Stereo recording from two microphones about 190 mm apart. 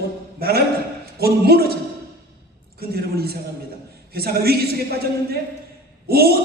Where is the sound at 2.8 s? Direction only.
55° right (ahead or behind).